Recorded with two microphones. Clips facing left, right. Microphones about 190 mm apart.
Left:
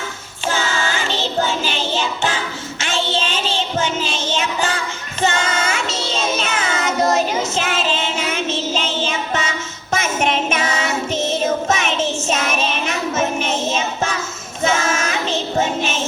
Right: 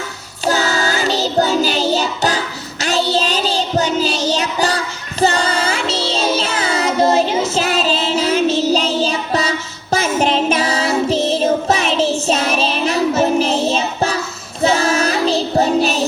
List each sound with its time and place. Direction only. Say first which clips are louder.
0.4 s music: right 4 dB; 40° right (ahead or behind)
5.2 s child singing: right 4 dB; 35° right (ahead or behind)